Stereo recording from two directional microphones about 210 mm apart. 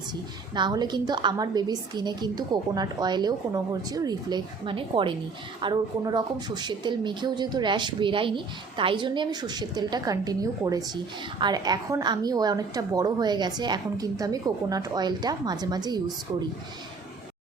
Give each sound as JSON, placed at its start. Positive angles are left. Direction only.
{"t": 0.5, "sound": "a woman's voice", "side_deg": -20}